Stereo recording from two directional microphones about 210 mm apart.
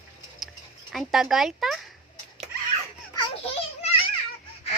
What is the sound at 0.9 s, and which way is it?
Speech, centre (ahead or behind).